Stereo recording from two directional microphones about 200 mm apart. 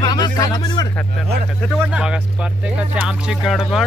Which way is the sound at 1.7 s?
5° right (ahead or behind).